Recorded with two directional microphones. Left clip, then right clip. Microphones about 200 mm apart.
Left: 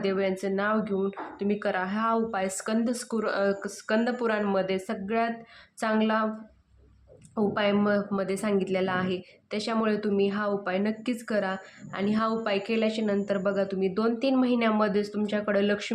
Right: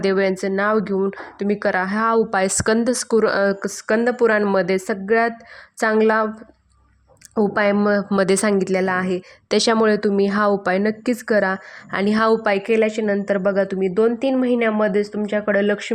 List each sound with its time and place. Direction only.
0.0 s a woman's voice: 45° right (ahead or behind)
7.3 s a woman's voice: 45° right (ahead or behind)